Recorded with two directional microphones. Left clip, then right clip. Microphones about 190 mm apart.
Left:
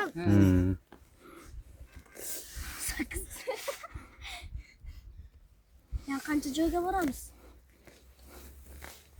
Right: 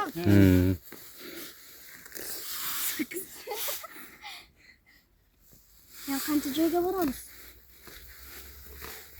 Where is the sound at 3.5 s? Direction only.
45° left (ahead or behind).